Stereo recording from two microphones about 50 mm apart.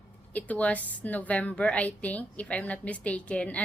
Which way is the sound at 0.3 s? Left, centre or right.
Left.